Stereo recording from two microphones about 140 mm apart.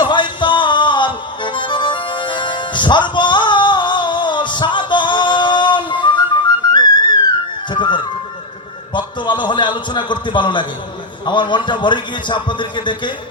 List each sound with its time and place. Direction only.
0.0 s music: 35° left (ahead or behind)
7.7 s a man's voice: 35° left (ahead or behind)